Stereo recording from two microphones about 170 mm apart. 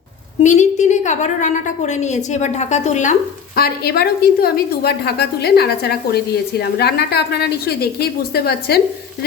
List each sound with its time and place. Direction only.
0.4 s a woman's voice: 45° left (ahead or behind); by 8.8 s 70° left (ahead or behind)